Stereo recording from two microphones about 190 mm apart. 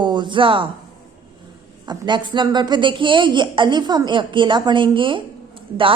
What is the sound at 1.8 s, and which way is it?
Speech, 25° right (ahead or behind).